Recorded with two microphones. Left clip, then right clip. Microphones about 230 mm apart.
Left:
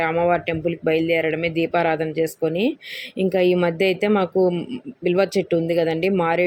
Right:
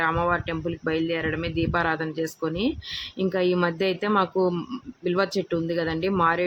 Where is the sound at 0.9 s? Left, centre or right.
Right.